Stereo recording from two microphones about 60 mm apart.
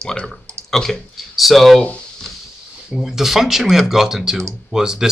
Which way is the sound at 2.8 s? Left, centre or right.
Centre.